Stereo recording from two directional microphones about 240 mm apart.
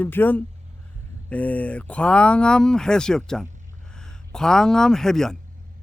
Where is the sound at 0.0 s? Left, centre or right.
Centre.